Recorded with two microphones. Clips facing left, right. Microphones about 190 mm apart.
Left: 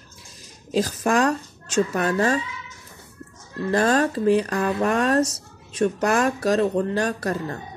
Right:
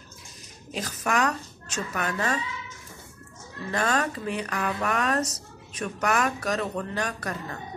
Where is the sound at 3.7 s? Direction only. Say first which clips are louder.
Left 7 dB; 35° left (ahead or behind).